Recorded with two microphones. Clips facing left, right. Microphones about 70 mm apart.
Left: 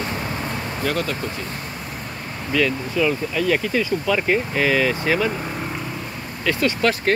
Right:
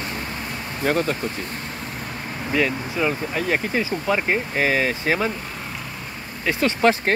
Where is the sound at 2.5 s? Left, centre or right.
Right.